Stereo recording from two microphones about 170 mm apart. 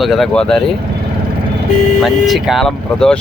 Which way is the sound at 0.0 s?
Centre (ahead or behind).